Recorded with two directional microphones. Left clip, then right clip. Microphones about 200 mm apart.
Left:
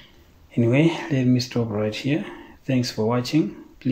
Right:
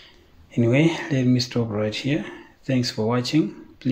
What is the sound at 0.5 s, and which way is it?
Speech, 5° right (ahead or behind).